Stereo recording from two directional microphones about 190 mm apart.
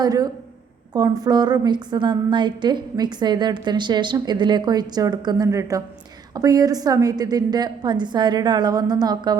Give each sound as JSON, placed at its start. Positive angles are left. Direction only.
{"t": 0.0, "sound": "a woman's voice", "side_deg": -20}